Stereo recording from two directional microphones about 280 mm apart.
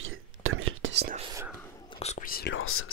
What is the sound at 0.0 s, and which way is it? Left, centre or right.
Whispering, right.